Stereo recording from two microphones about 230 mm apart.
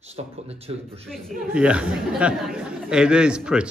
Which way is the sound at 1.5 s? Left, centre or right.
Centre.